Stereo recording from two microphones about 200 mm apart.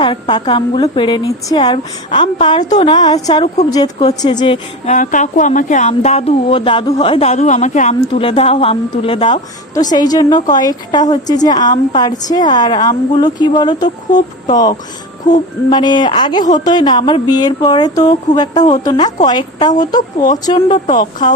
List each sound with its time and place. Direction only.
0.0 s speech: 25° left (ahead or behind)
2.6 s speech: 35° left (ahead or behind)
2.9 s speech: 20° left (ahead or behind)
4.9 s speech: 40° left (ahead or behind); by 13.9 s 20° left (ahead or behind)
15.7 s speech: 20° left (ahead or behind)
20.9 s speech: 40° left (ahead or behind)